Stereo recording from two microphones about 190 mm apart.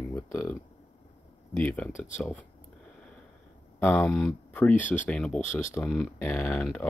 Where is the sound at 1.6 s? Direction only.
5° left (ahead or behind).